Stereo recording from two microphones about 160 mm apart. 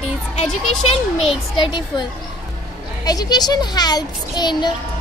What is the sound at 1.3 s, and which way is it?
Speech, 30° left (ahead or behind).